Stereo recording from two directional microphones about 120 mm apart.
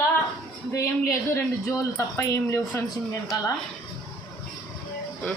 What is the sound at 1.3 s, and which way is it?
Speech, 20° left (ahead or behind).